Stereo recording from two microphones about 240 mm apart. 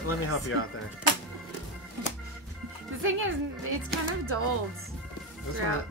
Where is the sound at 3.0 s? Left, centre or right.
Right.